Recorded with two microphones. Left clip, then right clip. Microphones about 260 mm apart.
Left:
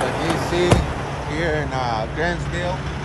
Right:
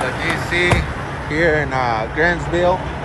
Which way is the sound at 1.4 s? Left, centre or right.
Centre.